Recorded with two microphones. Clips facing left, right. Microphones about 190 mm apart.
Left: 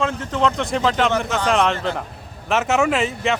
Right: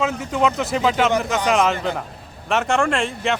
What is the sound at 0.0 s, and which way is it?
Speech, 10° right (ahead or behind).